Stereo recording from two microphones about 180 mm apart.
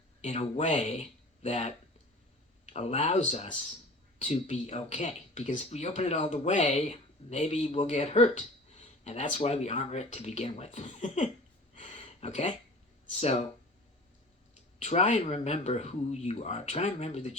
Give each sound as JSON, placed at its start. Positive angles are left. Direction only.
{"t": 0.2, "sound": "speech", "side_deg": 35}
{"t": 11.7, "sound": "a sound", "side_deg": 40}
{"t": 13.1, "sound": "speech", "side_deg": 35}
{"t": 14.8, "sound": "speech", "side_deg": 40}